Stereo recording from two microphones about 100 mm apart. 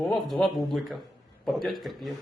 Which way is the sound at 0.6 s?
Centre (ahead or behind).